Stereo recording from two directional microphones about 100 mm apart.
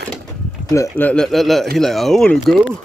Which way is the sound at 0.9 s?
15° left (ahead or behind).